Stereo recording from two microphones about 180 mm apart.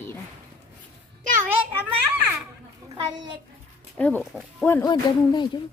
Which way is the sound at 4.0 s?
10° left (ahead or behind).